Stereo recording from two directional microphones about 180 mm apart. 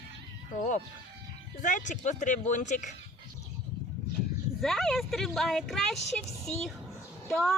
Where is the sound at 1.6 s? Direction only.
45° left (ahead or behind).